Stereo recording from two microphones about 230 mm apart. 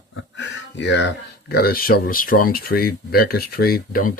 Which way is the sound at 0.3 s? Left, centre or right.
Left.